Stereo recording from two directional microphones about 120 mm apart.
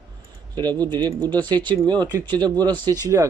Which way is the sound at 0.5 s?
35° right (ahead or behind).